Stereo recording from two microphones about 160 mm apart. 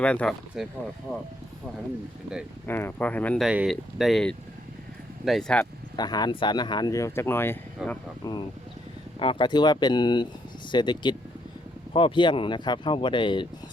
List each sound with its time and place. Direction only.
0.0 s speech: 5° left (ahead or behind)
0.6 s speech: 5° right (ahead or behind)
2.6 s speech: 15° left (ahead or behind)
3.4 s speech: 5° right (ahead or behind)
6.0 s speech: 25° left (ahead or behind)
7.8 s speech: 5° right (ahead or behind)
8.2 s speech: 25° left (ahead or behind)